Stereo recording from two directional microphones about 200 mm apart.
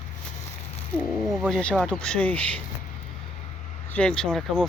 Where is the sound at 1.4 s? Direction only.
5° left (ahead or behind).